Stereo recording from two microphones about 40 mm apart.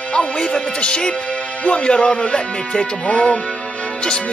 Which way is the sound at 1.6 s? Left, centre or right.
Left.